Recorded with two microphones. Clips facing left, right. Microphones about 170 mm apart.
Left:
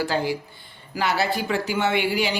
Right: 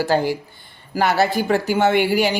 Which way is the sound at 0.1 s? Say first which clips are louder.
Right 5 dB; 50° right (ahead or behind).